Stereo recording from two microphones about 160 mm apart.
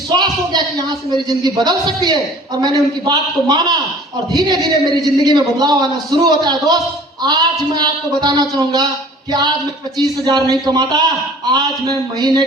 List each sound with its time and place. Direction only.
0.2 s a man's voice: 25° right (ahead or behind)
10.0 s a man's voice: 25° right (ahead or behind)